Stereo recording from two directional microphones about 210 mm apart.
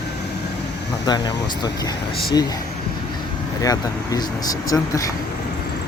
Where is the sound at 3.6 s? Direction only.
15° left (ahead or behind).